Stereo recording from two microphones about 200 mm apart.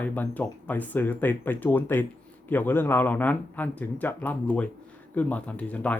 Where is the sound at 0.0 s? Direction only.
10° left (ahead or behind).